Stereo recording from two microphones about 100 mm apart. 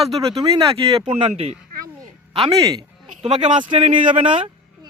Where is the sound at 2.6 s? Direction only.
40° right (ahead or behind).